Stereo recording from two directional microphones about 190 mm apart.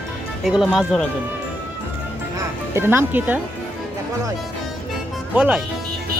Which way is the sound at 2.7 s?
10° right (ahead or behind).